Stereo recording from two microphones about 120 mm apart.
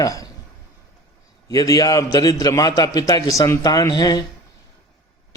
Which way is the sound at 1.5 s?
30° left (ahead or behind).